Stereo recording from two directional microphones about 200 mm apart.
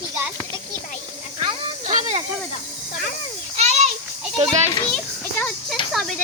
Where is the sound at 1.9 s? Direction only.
40° right (ahead or behind).